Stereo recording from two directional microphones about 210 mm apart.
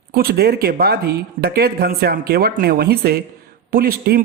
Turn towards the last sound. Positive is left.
turn(degrees=-45)  # may be behind; listen again after turning